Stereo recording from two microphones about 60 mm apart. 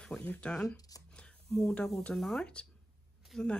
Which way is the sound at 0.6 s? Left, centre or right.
Left.